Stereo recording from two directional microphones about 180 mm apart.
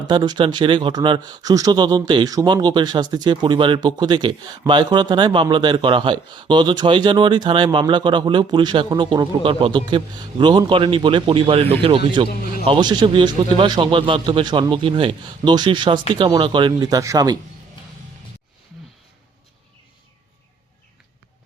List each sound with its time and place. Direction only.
0.1 s speech: 25° right (ahead or behind)